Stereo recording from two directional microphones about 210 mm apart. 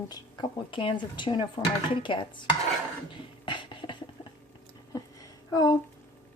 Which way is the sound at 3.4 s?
20° left (ahead or behind).